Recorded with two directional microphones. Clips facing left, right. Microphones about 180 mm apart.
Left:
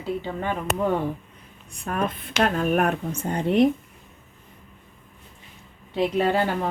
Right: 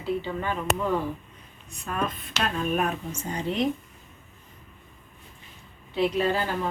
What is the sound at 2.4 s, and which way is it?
Speech, 65° left (ahead or behind).